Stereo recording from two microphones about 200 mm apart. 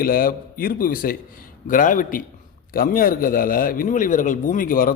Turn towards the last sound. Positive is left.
turn(degrees=45)  # may be behind; listen again after turning